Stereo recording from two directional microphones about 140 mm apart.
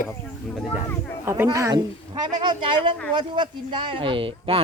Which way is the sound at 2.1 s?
35° right (ahead or behind).